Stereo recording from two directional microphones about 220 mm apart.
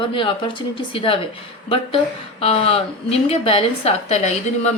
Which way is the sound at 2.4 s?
25° left (ahead or behind).